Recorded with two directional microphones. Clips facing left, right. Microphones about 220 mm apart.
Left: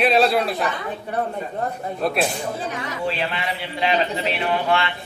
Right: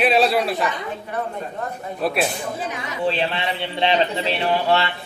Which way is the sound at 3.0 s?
30° right (ahead or behind).